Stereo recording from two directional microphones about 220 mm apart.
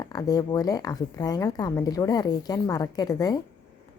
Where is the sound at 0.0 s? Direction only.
15° left (ahead or behind).